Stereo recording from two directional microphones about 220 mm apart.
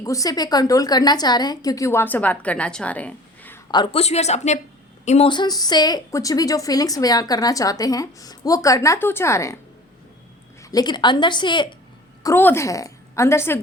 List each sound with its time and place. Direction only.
0.0 s a woman's voice: 15° left (ahead or behind)
3.7 s a woman's voice: 25° left (ahead or behind)
10.6 s a woman's voice: 15° left (ahead or behind)
12.2 s a woman's voice: 10° left (ahead or behind)